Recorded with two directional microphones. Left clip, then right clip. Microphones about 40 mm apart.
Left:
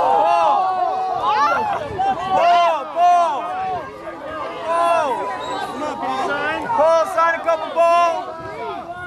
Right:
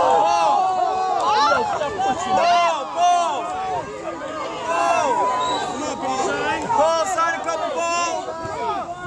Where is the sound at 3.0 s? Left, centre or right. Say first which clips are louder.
Left 3 dB; left.